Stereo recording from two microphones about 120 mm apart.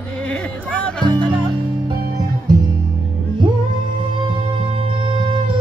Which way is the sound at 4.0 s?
45° right (ahead or behind).